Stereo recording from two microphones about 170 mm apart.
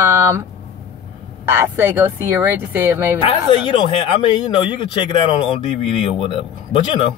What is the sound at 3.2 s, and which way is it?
Speech, 30° left (ahead or behind).